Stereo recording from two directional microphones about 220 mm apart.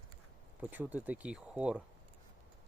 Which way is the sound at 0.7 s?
5° right (ahead or behind).